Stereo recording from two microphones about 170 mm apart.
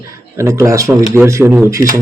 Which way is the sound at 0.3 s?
15° right (ahead or behind).